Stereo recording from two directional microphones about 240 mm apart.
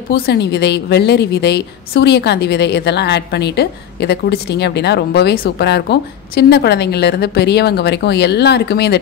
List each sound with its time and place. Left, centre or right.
0.1 s a woman's voice: left